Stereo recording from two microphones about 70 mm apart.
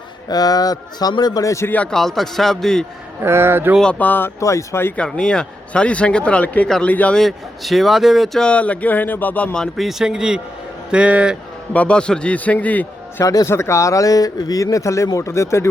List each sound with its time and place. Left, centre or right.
0.3 s a man's voice: left
1.6 s a man's voice: left
1.9 s a man's voice: centre
3.2 s speech: right
3.9 s a man's voice: left
4.4 s speech: left
4.9 s a man's voice: centre
7.2 s a man's voice: centre
8.4 s a man's voice: centre
9.7 s speech: centre
11.7 s a man's voice: centre
13.2 s speech: left
13.5 s speech: left